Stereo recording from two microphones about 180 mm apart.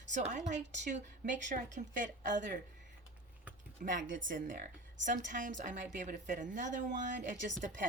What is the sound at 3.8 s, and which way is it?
A woman's voice, 45° right (ahead or behind).